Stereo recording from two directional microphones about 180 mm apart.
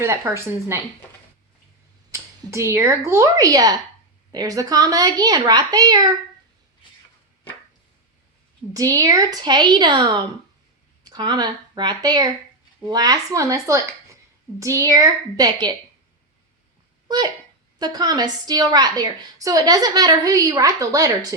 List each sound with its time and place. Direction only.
0.0 s speech: 15° right (ahead or behind)
2.1 s a woman's voice: 15° right (ahead or behind)
8.7 s a woman's voice: 20° right (ahead or behind)
17.7 s a woman's voice: 20° right (ahead or behind)